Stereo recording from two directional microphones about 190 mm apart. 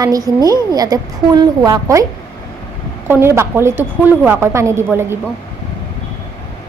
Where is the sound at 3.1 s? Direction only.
15° right (ahead or behind).